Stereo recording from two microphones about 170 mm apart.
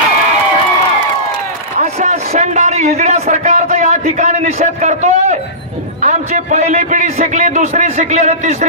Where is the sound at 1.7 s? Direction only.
40° right (ahead or behind).